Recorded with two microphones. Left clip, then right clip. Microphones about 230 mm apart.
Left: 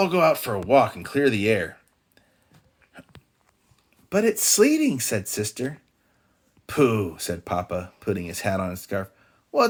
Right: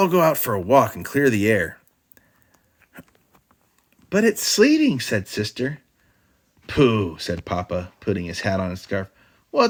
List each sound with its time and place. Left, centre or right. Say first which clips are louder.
0.0 s speech: right 2 dB; right
4.1 s speech: right 2 dB; right
5.3 s speech: right 3 dB; right